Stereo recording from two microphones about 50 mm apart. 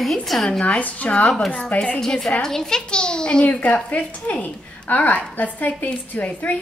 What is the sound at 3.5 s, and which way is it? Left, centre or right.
A woman's voice, left.